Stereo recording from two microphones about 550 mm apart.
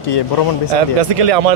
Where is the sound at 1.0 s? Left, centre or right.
Right.